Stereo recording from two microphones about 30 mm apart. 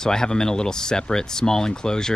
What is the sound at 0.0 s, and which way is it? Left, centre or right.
Speech, left.